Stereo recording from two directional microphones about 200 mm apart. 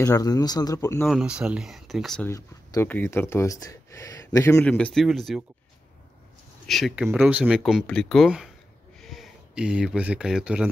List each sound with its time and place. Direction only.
0.0 s speech: 15° left (ahead or behind)
1.0 s speech: 5° right (ahead or behind)
2.3 s speech: 15° left (ahead or behind)
4.6 s speech: 5° left (ahead or behind)
6.7 s speech: centre (ahead or behind)